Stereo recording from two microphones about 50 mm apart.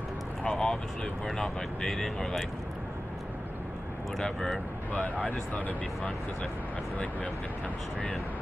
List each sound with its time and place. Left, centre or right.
0.4 s a sound: centre
1.2 s speech: centre
4.2 s speech: centre
5.5 s speech: left